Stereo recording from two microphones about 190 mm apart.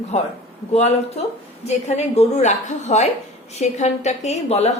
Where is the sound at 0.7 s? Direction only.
35° left (ahead or behind).